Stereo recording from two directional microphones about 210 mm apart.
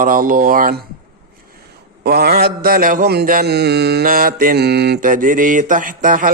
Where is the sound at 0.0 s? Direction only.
40° right (ahead or behind).